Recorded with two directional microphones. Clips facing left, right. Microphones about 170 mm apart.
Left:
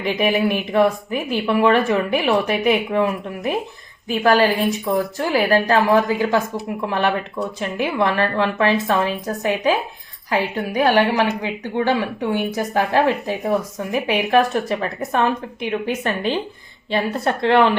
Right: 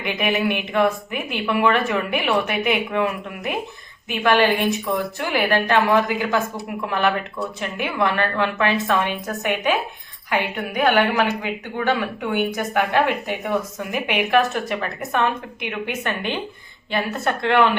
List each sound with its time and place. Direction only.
0.0 s speech: 35° left (ahead or behind)